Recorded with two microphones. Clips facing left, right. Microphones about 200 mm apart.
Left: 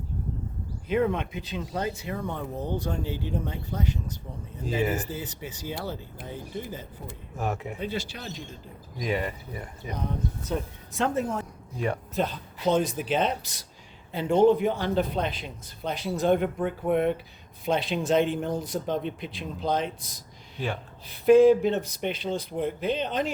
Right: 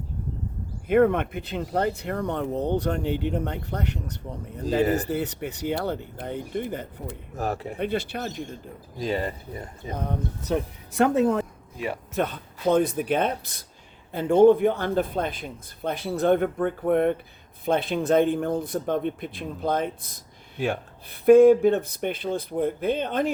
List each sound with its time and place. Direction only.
0.9 s speech: 55° right (ahead or behind)
7.3 s speech: 35° right (ahead or behind)
7.8 s speech: 60° right (ahead or behind)
9.0 s speech: 35° right (ahead or behind)
9.9 s speech: 60° right (ahead or behind)
12.1 s speech: 60° right (ahead or behind)